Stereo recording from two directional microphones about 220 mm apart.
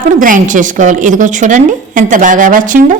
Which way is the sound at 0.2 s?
35° right (ahead or behind).